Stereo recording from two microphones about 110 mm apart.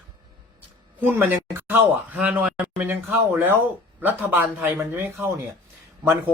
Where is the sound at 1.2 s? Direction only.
20° right (ahead or behind).